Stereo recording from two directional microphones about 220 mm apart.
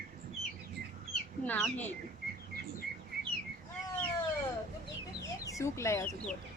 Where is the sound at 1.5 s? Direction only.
5° left (ahead or behind).